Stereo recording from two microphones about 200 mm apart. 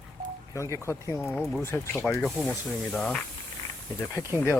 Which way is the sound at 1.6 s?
15° left (ahead or behind).